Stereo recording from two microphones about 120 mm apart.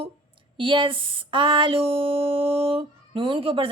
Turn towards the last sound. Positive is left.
turn(degrees=-50)  # may be behind; listen again after turning